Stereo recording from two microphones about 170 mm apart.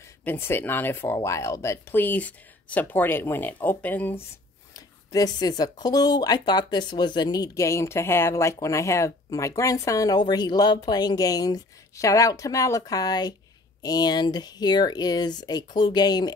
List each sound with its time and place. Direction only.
0.2 s speech: 10° left (ahead or behind)
4.7 s speech: 20° left (ahead or behind)